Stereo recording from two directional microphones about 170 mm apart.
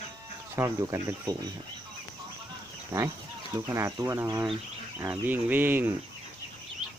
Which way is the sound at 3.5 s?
15° right (ahead or behind).